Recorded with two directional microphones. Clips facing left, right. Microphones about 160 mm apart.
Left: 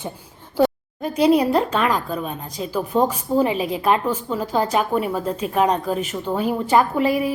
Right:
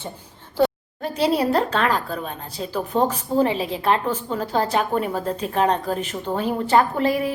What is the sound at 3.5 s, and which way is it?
Speech, 30° right (ahead or behind).